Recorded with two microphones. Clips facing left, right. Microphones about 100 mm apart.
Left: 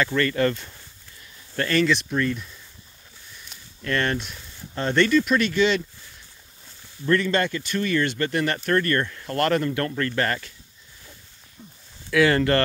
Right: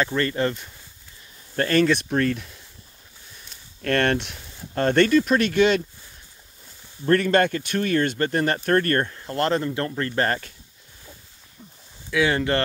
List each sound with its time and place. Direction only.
0.0 s speech: 25° right (ahead or behind)
1.6 s speech: 40° right (ahead or behind)
3.8 s speech: 55° right (ahead or behind)
7.1 s speech: 50° right (ahead or behind)
9.1 s speech: 25° right (ahead or behind)
12.1 s speech: 15° right (ahead or behind)